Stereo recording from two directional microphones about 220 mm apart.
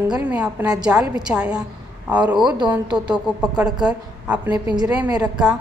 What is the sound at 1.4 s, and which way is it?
A woman's voice, 5° right (ahead or behind).